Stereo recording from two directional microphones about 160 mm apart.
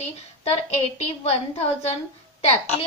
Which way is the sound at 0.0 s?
40° left (ahead or behind).